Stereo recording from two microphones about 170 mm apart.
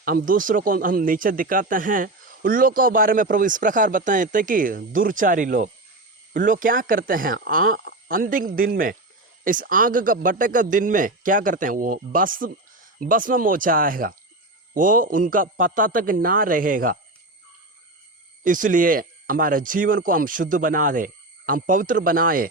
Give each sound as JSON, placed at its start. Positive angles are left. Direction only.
{"t": 0.0, "sound": "speech", "side_deg": -60}
{"t": 18.4, "sound": "speech", "side_deg": -50}